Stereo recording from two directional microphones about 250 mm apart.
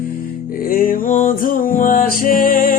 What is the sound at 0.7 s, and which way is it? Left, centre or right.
Music, left.